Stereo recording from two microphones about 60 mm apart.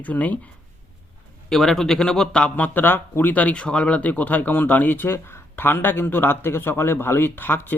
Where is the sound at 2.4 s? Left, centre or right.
Left.